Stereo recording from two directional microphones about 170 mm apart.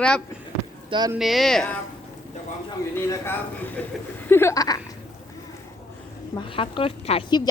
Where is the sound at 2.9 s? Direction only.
15° left (ahead or behind).